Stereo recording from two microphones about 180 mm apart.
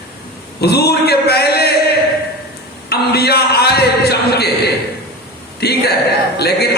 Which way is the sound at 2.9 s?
65° left (ahead or behind).